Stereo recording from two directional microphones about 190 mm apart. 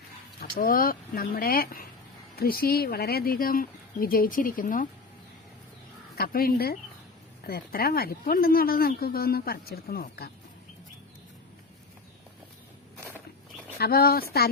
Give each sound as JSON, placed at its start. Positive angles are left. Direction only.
{"t": 0.3, "sound": "speech", "side_deg": 50}
{"t": 6.1, "sound": "speech", "side_deg": 50}
{"t": 13.7, "sound": "speech", "side_deg": 55}